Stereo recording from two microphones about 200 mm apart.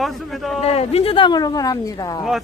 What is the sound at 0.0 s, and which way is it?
Speech, centre (ahead or behind).